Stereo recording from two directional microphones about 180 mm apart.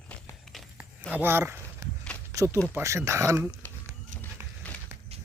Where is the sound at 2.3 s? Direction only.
15° right (ahead or behind).